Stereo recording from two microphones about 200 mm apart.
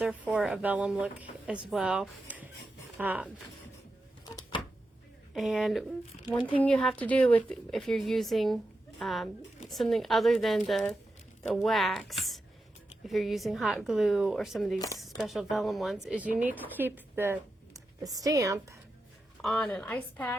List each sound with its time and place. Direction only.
0.0 s speech: 5° right (ahead or behind)
5.3 s speech: centre (ahead or behind)
14.8 s speech: 15° left (ahead or behind)
15.2 s a woman's voice: centre (ahead or behind); by 18.8 s 15° right (ahead or behind)
19.4 s speech: centre (ahead or behind)